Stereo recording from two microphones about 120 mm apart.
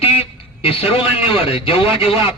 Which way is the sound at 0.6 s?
55° left (ahead or behind).